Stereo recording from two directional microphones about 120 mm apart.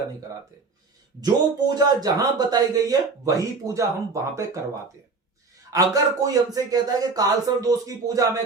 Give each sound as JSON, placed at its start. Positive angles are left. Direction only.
{"t": 1.2, "sound": "speech", "side_deg": -35}
{"t": 5.7, "sound": "speech", "side_deg": -30}